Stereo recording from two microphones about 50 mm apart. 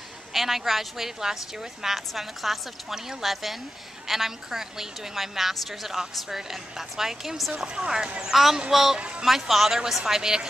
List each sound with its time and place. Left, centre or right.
0.3 s a woman's voice: centre
7.6 s a woman's voice: centre
8.9 s speech: right
9.2 s a woman's voice: centre